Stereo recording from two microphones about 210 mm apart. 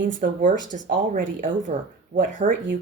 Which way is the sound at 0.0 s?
40° right (ahead or behind).